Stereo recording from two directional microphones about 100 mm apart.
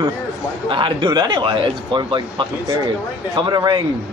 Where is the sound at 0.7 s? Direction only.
55° right (ahead or behind).